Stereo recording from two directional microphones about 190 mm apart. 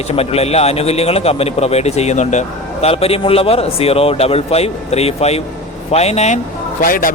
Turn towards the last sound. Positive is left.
turn(degrees=45)  # may be behind; listen again after turning